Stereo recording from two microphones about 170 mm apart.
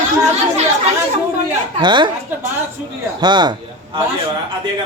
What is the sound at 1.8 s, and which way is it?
Speech, 25° right (ahead or behind).